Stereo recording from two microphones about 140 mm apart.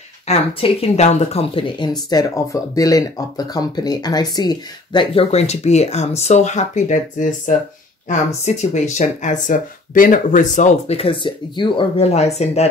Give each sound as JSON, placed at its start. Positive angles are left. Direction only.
{"t": 0.3, "sound": "speech", "side_deg": 45}
{"t": 2.0, "sound": "speech", "side_deg": 25}
{"t": 12.0, "sound": "speech", "side_deg": 50}